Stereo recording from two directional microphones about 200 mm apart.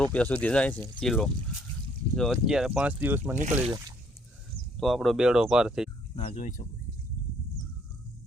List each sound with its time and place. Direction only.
0.0 s speech: 5° left (ahead or behind)
3.3 s speech: 35° right (ahead or behind)
4.8 s speech: centre (ahead or behind)
6.1 s speech: 35° left (ahead or behind)